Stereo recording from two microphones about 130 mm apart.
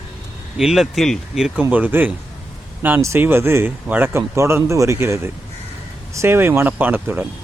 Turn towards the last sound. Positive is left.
turn(degrees=-15)  # may be behind; listen again after turning